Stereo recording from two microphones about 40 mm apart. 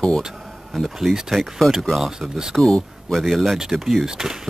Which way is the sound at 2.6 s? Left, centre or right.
Centre.